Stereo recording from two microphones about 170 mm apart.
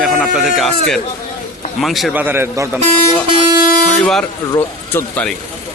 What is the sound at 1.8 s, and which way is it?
A man's voice, centre (ahead or behind).